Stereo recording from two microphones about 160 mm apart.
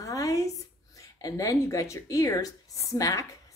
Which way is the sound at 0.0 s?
20° left (ahead or behind).